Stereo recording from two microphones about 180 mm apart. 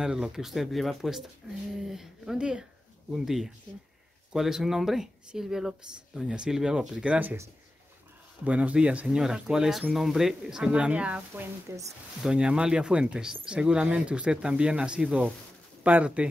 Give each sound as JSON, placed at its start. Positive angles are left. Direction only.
{"t": 0.0, "sound": "speech", "side_deg": -5}
{"t": 8.5, "sound": "speech", "side_deg": -5}